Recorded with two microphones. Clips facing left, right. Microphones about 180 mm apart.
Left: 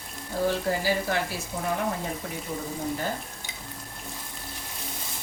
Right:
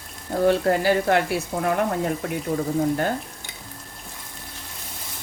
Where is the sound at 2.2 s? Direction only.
70° right (ahead or behind).